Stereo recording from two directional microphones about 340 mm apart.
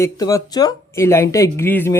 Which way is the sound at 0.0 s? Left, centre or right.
Centre.